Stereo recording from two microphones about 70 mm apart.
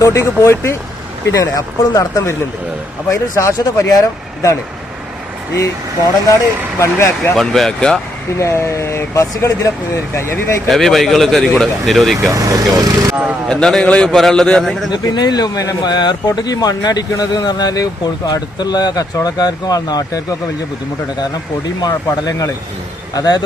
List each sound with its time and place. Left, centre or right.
0.0 s speech: left
1.3 s speech: left
6.2 s speech: left
7.3 s speech: centre
8.4 s speech: left
10.2 s speech: left
10.7 s speech: centre
12.3 s speech: right
13.5 s speech: centre
14.1 s speech: centre
14.9 s speech: left
15.5 s speech: left
21.8 s speech: left